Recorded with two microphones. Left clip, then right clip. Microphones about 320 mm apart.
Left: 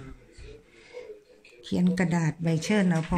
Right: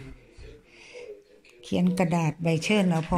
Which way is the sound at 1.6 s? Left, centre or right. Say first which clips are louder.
Right 2 dB; centre.